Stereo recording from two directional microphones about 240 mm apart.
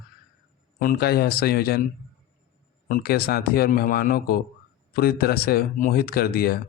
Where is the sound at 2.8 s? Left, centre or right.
Left.